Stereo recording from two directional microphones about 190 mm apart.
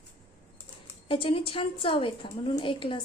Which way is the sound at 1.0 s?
30° left (ahead or behind).